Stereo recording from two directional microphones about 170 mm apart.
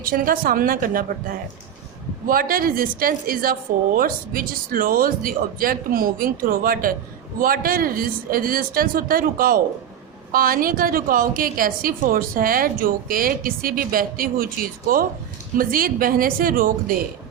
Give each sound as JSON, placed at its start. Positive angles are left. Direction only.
{"t": 0.0, "sound": "a woman's voice", "side_deg": -55}